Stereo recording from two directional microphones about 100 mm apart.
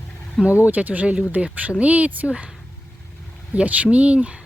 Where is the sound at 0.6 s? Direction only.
15° right (ahead or behind).